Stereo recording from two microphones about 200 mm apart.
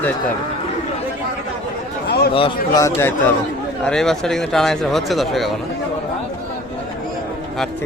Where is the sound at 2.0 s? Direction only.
55° left (ahead or behind).